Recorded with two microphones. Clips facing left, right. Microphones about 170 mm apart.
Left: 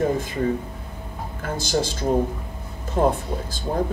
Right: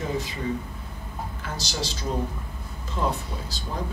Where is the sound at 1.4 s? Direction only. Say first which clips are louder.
Left 10 dB; 50° left (ahead or behind).